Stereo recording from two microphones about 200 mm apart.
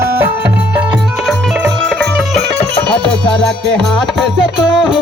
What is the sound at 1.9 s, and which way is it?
Music, centre (ahead or behind).